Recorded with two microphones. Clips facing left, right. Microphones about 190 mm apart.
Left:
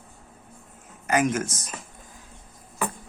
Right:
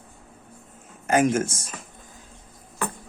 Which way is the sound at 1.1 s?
30° right (ahead or behind).